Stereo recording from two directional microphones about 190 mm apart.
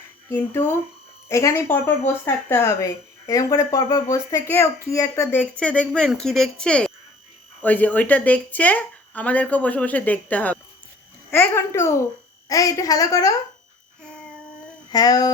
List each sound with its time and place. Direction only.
0.3 s a child's voice: 10° left (ahead or behind)
14.9 s speech: 20° left (ahead or behind)